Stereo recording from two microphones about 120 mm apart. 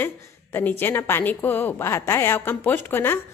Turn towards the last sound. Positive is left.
turn(degrees=20)  # may be behind; listen again after turning